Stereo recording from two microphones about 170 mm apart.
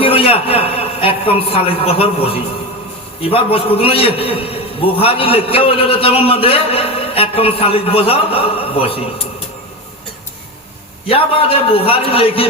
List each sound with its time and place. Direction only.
0.0 s a man's voice: 35° left (ahead or behind)
11.1 s a man's voice: 35° left (ahead or behind)